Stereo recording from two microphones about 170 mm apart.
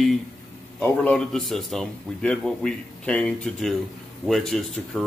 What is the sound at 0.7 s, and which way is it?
A man's voice, 5° left (ahead or behind).